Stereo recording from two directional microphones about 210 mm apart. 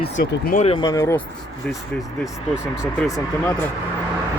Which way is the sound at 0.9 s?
15° left (ahead or behind).